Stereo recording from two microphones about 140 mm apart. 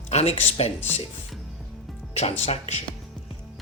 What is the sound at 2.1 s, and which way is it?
Speech, 50° left (ahead or behind).